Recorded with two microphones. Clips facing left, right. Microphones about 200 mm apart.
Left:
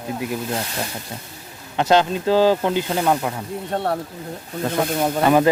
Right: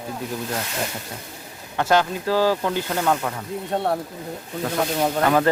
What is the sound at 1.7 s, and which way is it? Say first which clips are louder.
Speech: left 3 dB; 20° left (ahead or behind).